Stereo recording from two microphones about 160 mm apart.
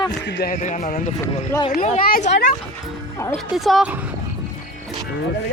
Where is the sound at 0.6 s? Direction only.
50° left (ahead or behind).